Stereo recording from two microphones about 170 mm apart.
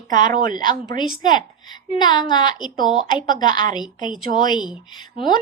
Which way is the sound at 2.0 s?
25° left (ahead or behind).